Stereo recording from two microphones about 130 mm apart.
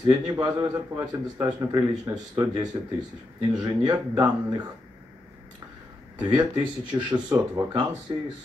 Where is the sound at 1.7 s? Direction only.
25° right (ahead or behind).